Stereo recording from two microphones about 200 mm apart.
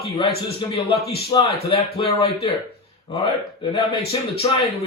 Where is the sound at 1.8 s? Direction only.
30° left (ahead or behind).